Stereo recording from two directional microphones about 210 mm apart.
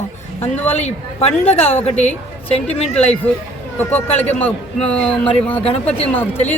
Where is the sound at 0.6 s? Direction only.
30° left (ahead or behind).